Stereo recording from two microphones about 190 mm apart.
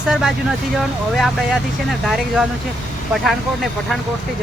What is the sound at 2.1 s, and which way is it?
Speech, centre (ahead or behind).